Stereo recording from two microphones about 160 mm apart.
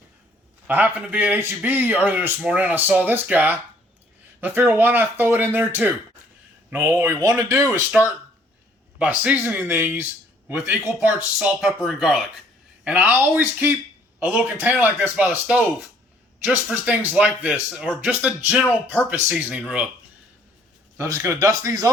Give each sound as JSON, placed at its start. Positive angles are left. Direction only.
{"t": 0.7, "sound": "a man's voice", "side_deg": -10}
{"t": 11.6, "sound": "a man's voice", "side_deg": 0}
{"t": 21.0, "sound": "speech", "side_deg": -20}